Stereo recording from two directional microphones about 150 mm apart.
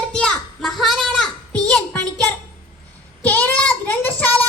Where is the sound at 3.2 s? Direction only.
10° left (ahead or behind).